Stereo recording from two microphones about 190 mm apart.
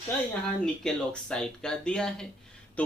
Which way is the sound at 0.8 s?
5° left (ahead or behind).